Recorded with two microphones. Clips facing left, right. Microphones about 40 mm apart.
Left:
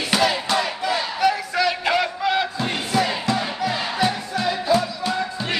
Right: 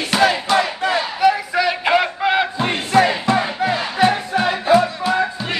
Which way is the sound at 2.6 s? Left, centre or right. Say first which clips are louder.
Right 6 dB; right.